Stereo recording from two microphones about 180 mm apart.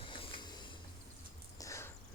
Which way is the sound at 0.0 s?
30° left (ahead or behind).